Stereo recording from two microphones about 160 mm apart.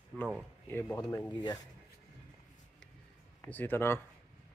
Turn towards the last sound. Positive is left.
turn(degrees=15)  # may be behind; listen again after turning